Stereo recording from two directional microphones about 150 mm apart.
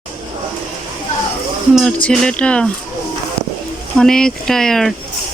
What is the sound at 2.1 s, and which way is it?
Speech, 5° left (ahead or behind).